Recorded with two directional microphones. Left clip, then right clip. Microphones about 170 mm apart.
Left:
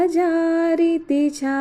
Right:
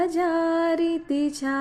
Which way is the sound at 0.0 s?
20° left (ahead or behind).